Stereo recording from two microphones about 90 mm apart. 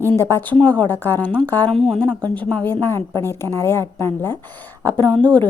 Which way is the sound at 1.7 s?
Centre (ahead or behind).